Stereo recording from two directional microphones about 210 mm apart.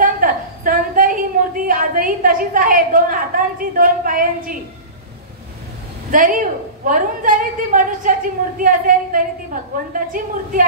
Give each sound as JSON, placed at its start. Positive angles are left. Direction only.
{"t": 0.0, "sound": "a sound", "side_deg": -40}
{"t": 1.7, "sound": "a woman's voice", "side_deg": -40}
{"t": 6.1, "sound": "a woman's voice", "side_deg": -40}